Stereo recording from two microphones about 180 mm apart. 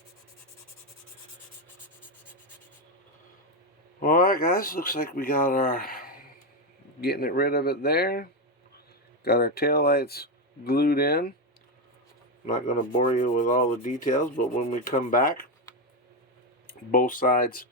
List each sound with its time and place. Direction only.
4.0 s rub: 50° left (ahead or behind)
7.0 s speech: 60° left (ahead or behind)
12.5 s rub: 45° left (ahead or behind)
16.6 s rub: 50° left (ahead or behind)